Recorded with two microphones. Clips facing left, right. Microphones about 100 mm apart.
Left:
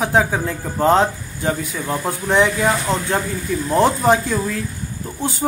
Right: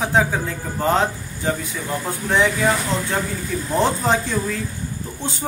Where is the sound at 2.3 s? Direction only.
20° left (ahead or behind).